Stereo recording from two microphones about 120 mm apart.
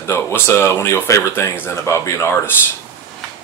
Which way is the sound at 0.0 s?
20° left (ahead or behind).